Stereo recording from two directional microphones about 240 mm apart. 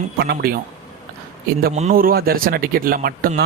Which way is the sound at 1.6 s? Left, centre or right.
Right.